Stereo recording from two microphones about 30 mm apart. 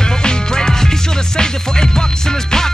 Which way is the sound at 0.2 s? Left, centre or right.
Left.